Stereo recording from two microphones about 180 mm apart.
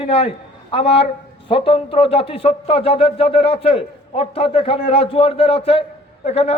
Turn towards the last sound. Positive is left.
turn(degrees=35)  # may be behind; listen again after turning